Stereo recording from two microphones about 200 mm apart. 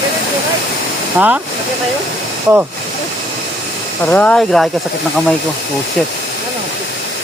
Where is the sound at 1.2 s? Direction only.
5° right (ahead or behind).